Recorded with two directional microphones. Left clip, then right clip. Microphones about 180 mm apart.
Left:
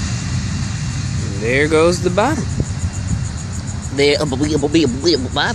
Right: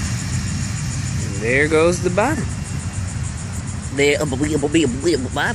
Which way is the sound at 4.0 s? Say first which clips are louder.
Left 2 dB; 5° left (ahead or behind).